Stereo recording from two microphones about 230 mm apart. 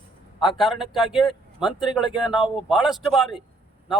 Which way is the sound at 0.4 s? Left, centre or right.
Centre.